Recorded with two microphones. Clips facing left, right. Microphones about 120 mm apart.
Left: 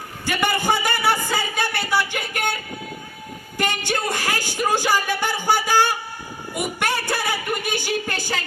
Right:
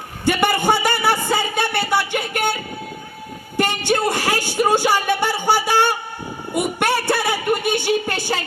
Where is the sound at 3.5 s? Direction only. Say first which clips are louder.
Right 5 dB; 30° right (ahead or behind).